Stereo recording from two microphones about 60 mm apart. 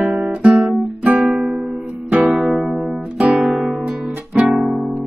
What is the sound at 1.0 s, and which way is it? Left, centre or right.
Music, centre.